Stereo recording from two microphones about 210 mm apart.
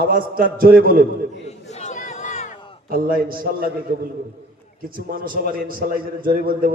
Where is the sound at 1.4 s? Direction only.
30° left (ahead or behind).